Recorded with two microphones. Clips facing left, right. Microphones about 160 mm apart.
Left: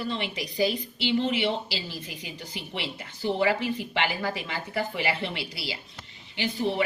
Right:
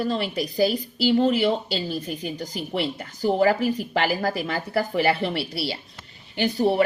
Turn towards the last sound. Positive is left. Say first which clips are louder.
# right 7 dB
turn(degrees=-45)  # may be behind; listen again after turning